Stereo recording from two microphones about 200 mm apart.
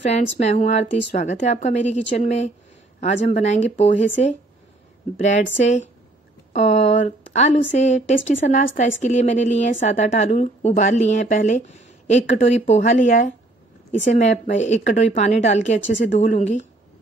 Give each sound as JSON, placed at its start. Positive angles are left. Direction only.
{"t": 0.0, "sound": "a woman's voice", "side_deg": 35}